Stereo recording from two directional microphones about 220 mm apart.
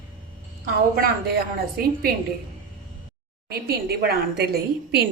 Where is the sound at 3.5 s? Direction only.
45° right (ahead or behind).